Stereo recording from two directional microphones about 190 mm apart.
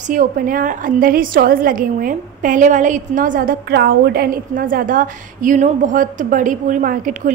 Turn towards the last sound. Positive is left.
turn(degrees=-45)  # may be behind; listen again after turning